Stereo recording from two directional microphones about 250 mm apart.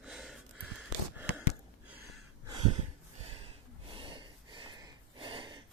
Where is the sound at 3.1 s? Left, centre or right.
Right.